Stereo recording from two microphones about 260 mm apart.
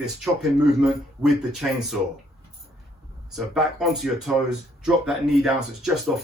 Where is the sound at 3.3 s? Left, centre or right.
Centre.